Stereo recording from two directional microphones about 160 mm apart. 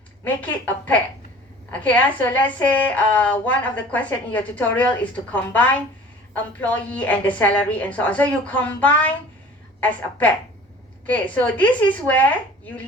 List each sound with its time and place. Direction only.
0.3 s a woman's voice: 10° left (ahead or behind)